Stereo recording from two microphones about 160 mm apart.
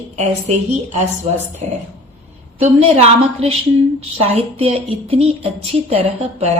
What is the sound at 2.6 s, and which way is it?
Speech, 40° right (ahead or behind).